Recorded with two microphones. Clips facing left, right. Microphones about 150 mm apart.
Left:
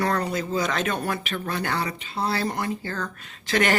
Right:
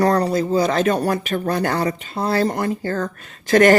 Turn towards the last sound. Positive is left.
turn(degrees=-45)  # may be behind; listen again after turning